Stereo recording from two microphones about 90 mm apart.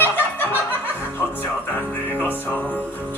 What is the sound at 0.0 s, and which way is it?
Music, 25° left (ahead or behind).